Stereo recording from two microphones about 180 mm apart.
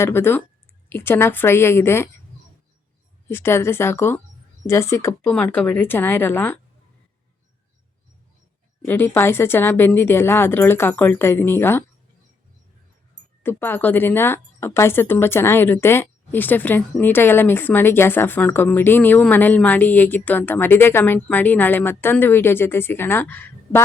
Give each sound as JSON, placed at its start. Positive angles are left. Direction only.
{"t": 0.0, "sound": "a woman's voice", "side_deg": 10}
{"t": 3.2, "sound": "a woman's voice", "side_deg": 10}
{"t": 8.8, "sound": "a woman's voice", "side_deg": 10}
{"t": 13.4, "sound": "a woman's voice", "side_deg": 10}